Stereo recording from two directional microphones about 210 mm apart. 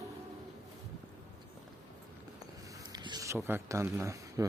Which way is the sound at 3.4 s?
10° right (ahead or behind).